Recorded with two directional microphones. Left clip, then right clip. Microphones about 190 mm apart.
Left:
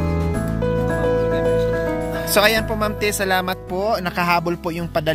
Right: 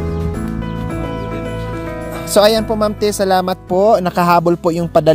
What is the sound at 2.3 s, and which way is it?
Speech, 15° right (ahead or behind).